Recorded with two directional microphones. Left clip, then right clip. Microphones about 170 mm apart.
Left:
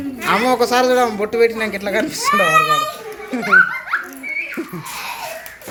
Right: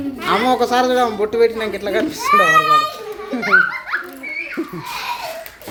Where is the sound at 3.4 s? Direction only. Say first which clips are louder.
Left 2 dB; 45° left (ahead or behind).